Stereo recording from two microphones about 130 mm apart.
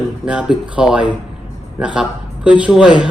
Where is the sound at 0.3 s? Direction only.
5° right (ahead or behind).